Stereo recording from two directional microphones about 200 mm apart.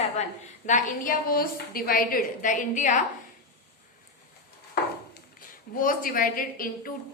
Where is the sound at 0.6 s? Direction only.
40° left (ahead or behind).